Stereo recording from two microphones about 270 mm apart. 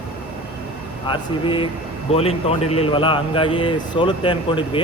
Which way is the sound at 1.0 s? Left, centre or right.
Centre.